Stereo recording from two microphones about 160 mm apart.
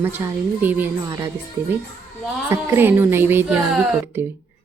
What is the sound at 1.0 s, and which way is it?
Speech, 20° right (ahead or behind).